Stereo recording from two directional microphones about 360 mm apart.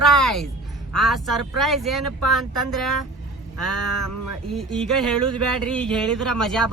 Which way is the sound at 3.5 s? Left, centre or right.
Right.